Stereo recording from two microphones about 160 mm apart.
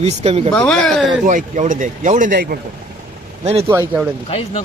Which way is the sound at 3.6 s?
15° right (ahead or behind).